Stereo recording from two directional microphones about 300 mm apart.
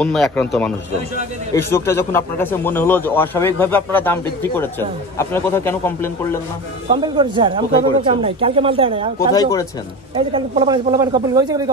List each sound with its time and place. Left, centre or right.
0.0 s a man's voice: centre
6.9 s speech: centre
9.3 s a man's voice: centre
10.1 s speech: centre